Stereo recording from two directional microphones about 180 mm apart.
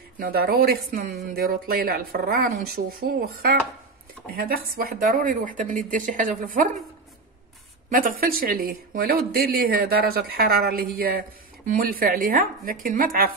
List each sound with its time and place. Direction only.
0.2 s speech: 55° right (ahead or behind)
8.2 s speech: 55° right (ahead or behind)